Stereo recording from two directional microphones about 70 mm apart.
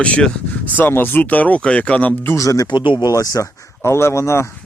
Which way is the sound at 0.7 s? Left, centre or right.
Left.